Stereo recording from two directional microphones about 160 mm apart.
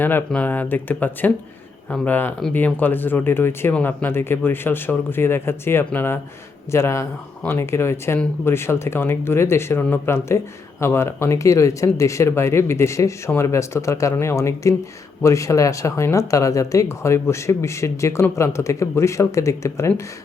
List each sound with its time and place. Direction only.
0.0 s speech: 10° left (ahead or behind)